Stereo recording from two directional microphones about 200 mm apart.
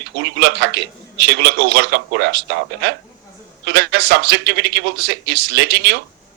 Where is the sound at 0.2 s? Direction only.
55° right (ahead or behind).